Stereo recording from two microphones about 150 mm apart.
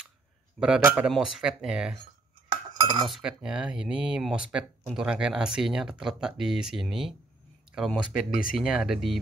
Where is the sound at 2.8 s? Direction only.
30° right (ahead or behind).